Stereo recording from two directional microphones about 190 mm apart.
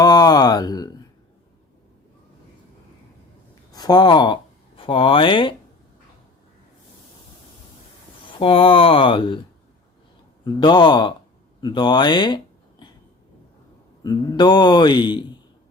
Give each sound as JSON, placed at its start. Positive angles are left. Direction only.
{"t": 0.0, "sound": "a man's voice", "side_deg": 20}
{"t": 3.7, "sound": "a man's voice", "side_deg": 20}
{"t": 8.3, "sound": "a man's voice", "side_deg": 25}
{"t": 10.4, "sound": "a man's voice", "side_deg": 25}
{"t": 14.0, "sound": "a man's voice", "side_deg": 20}